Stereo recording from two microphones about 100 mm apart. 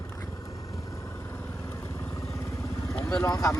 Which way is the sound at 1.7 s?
30° left (ahead or behind).